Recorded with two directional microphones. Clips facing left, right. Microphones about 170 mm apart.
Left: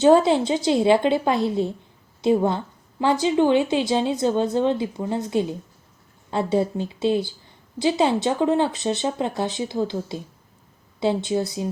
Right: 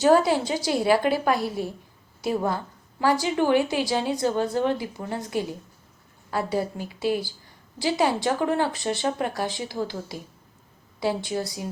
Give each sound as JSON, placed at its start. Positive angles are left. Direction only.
{"t": 0.0, "sound": "a woman's voice", "side_deg": 25}